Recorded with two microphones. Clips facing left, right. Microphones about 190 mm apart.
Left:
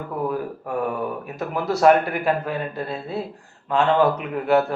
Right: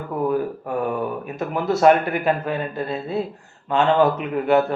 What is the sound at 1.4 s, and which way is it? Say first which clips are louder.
A man's voice: right 2 dB; centre (ahead or behind).